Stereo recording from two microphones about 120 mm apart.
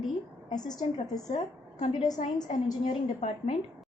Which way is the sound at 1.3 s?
75° left (ahead or behind).